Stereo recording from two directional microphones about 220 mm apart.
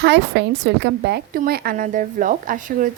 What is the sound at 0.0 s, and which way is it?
A woman's voice, 50° right (ahead or behind).